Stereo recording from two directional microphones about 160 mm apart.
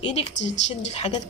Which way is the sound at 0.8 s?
40° left (ahead or behind).